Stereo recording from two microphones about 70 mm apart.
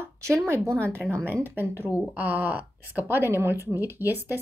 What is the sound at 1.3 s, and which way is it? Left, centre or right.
Speech, left.